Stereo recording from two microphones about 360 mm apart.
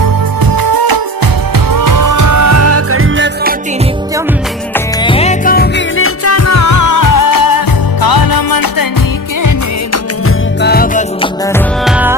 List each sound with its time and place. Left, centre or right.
0.5 s music: right
1.5 s music: right
4.7 s music: centre; by 8.9 s left
9.9 s music: left
11.4 s music: centre